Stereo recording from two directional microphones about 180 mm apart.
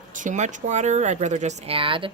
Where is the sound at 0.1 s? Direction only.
45° right (ahead or behind).